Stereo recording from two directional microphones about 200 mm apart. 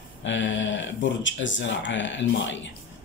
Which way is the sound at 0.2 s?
65° left (ahead or behind).